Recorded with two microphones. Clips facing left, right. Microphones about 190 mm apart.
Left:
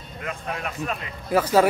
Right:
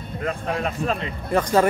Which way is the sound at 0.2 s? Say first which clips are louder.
Right 6 dB; 35° right (ahead or behind).